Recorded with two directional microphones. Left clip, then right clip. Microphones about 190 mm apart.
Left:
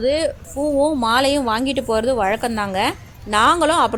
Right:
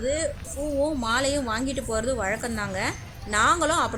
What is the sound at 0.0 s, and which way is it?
A woman's voice, 35° left (ahead or behind).